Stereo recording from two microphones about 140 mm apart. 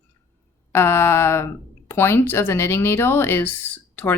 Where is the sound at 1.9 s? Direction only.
15° left (ahead or behind).